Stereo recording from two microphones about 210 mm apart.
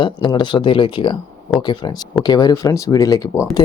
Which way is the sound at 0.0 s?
20° left (ahead or behind).